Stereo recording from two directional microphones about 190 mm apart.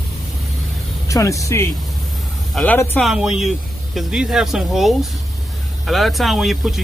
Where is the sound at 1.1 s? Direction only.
15° left (ahead or behind).